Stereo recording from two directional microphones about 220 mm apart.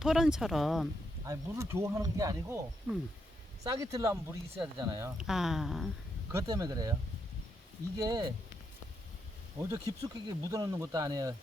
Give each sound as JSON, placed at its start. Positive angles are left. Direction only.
{"t": 0.0, "sound": "speech", "side_deg": 0}
{"t": 1.3, "sound": "speech", "side_deg": -15}
{"t": 3.6, "sound": "speech", "side_deg": -15}
{"t": 6.3, "sound": "speech", "side_deg": -15}
{"t": 7.9, "sound": "speech", "side_deg": -15}
{"t": 9.6, "sound": "speech", "side_deg": -15}